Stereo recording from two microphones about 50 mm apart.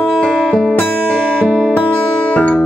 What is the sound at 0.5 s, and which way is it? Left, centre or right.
Music, centre.